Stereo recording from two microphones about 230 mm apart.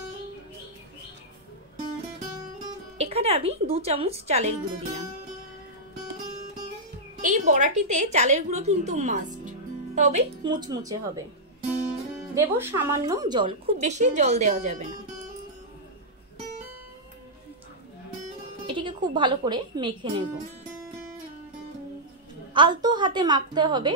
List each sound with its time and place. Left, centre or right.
3.0 s a woman's voice: right
7.2 s a woman's voice: right
10.4 s speech: centre
12.4 s a woman's voice: centre; by 14.9 s right
18.7 s speech: right
22.5 s a woman's voice: centre